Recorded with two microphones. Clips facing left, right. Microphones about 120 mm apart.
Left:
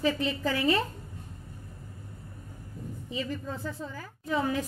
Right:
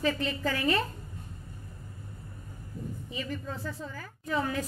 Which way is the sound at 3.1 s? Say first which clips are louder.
Left 4 dB; 30° left (ahead or behind).